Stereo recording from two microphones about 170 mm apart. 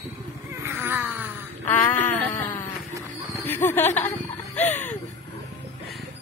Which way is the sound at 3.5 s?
15° left (ahead or behind).